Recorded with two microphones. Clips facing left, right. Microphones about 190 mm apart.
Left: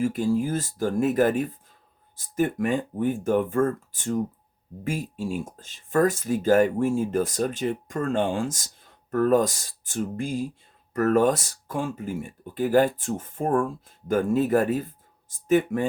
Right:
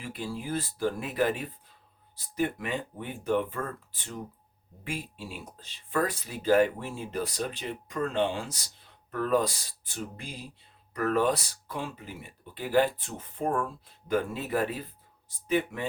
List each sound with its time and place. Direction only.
0.0 s speech: 45° left (ahead or behind)